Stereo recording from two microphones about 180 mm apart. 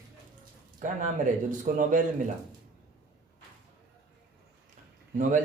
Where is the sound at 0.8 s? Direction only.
45° right (ahead or behind).